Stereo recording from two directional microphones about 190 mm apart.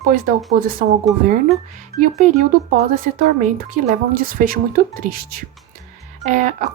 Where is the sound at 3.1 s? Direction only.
45° right (ahead or behind).